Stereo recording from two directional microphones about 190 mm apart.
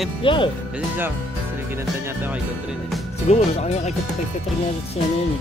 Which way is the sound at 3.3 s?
35° left (ahead or behind).